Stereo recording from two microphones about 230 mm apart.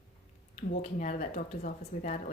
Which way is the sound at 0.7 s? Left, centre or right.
Left.